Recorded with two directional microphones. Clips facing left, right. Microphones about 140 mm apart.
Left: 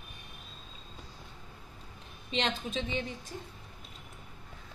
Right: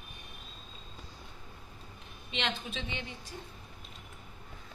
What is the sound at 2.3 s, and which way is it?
Speech, 40° left (ahead or behind).